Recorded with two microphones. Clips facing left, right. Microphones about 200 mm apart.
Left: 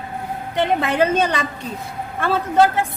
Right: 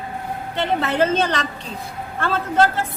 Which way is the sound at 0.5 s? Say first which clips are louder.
Left 2 dB; 15° left (ahead or behind).